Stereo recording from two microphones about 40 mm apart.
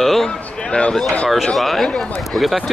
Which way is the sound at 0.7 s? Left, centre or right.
Centre.